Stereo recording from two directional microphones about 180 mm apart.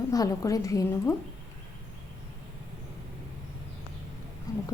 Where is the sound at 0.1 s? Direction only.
20° left (ahead or behind).